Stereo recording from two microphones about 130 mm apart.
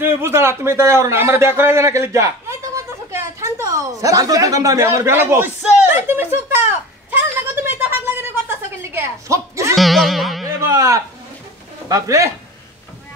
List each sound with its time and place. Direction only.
0.0 s a man's voice: 20° right (ahead or behind)
5.6 s a sound: 15° right (ahead or behind)
9.8 s music: centre (ahead or behind)
10.7 s speech: 25° right (ahead or behind)